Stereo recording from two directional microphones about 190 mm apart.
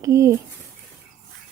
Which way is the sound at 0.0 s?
15° right (ahead or behind).